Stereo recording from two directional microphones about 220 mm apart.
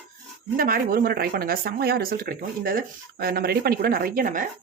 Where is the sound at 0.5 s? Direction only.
40° right (ahead or behind).